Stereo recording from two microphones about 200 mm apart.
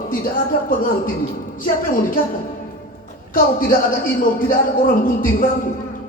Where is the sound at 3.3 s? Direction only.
45° left (ahead or behind).